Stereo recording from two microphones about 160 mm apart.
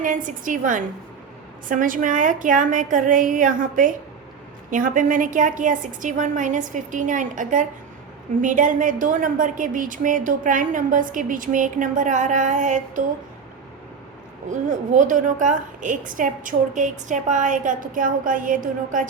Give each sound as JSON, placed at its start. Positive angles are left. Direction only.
{"t": 0.0, "sound": "a woman's voice", "side_deg": -55}
{"t": 14.5, "sound": "a woman's voice", "side_deg": -50}